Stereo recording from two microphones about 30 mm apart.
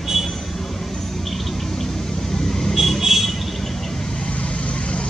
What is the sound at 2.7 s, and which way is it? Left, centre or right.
Vehicle, centre.